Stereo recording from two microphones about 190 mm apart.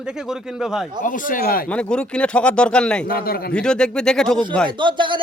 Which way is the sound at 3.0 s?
50° left (ahead or behind).